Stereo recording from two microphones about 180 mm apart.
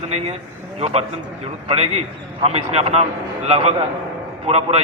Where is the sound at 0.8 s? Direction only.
35° right (ahead or behind).